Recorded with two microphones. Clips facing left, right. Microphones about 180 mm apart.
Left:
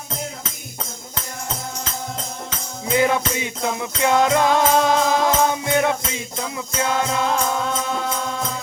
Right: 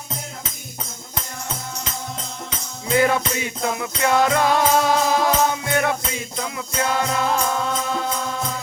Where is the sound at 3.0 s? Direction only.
15° left (ahead or behind).